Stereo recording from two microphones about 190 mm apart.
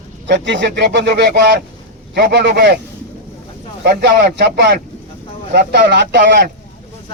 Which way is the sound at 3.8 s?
60° right (ahead or behind).